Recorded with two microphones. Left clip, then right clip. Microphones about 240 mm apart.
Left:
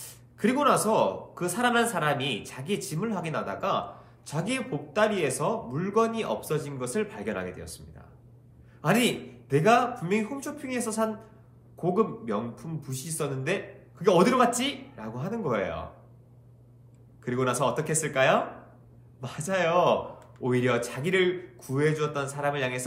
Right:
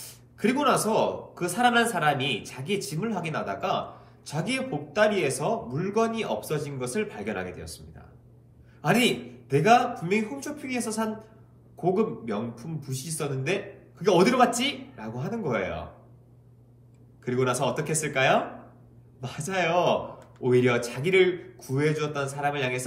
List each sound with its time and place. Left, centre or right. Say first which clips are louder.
0.4 s speech: even; centre
8.8 s speech: right 2 dB; centre
17.2 s speech: right 1 dB; centre